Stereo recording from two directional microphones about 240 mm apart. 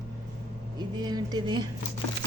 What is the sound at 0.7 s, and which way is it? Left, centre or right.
Speech, centre.